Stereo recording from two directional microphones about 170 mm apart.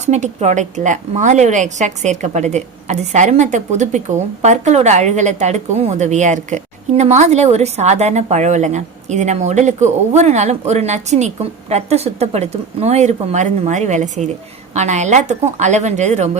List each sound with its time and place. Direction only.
0.0 s a woman's voice: 40° right (ahead or behind)